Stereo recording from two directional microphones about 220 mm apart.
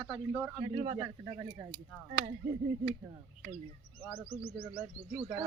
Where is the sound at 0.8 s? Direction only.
20° right (ahead or behind).